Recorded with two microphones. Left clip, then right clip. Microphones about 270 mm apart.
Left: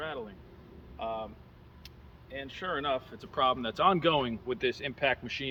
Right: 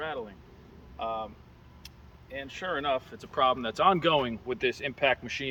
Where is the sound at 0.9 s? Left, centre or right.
Centre.